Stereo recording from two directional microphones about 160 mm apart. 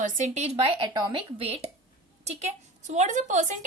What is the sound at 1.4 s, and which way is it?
A woman's voice, 40° right (ahead or behind).